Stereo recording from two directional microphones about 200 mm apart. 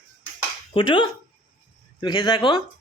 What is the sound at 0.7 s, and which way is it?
Speech, 25° left (ahead or behind).